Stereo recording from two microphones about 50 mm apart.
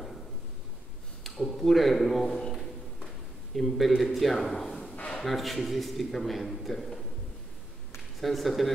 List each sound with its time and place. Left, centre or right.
1.2 s a sound: centre
3.5 s a man's voice: centre
8.2 s a man's voice: centre